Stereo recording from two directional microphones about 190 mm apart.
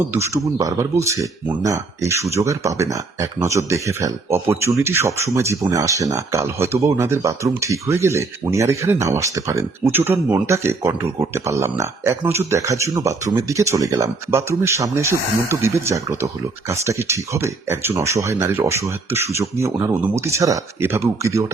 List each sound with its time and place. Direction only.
0.1 s speech: 15° right (ahead or behind)